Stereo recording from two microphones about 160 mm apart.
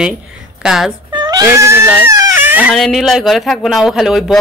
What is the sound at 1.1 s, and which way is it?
Cat, 25° right (ahead or behind).